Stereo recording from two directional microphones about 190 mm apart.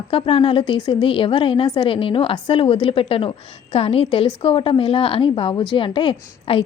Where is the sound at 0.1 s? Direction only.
30° left (ahead or behind).